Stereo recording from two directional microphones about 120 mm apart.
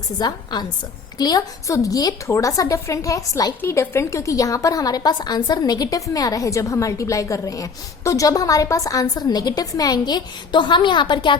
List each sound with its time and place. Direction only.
0.2 s a woman's voice: 35° left (ahead or behind)